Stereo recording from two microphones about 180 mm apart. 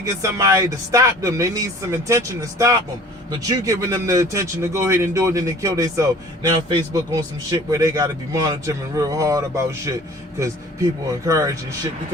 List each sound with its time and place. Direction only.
0.0 s a man's voice: 15° right (ahead or behind)
11.3 s speech: 20° right (ahead or behind)